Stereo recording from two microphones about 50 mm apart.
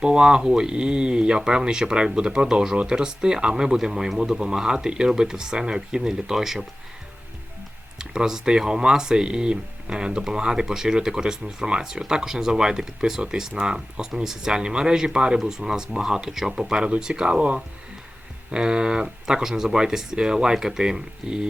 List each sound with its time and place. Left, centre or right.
0.0 s speech: centre
7.9 s speech: centre